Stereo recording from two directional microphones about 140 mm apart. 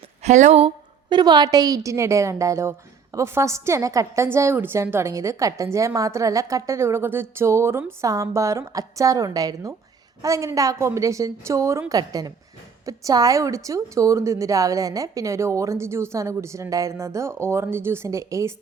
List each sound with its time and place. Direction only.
0.2 s speech: 55° right (ahead or behind)
1.1 s a woman's voice: 30° right (ahead or behind)